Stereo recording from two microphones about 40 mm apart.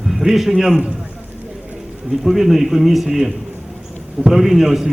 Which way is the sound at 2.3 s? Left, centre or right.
Centre.